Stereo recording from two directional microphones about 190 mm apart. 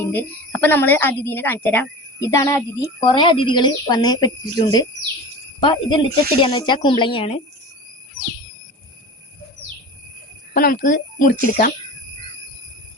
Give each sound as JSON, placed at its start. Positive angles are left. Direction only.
{"t": 0.1, "sound": "a woman's voice", "side_deg": 10}
{"t": 3.0, "sound": "speech", "side_deg": 25}
{"t": 10.5, "sound": "speech", "side_deg": 50}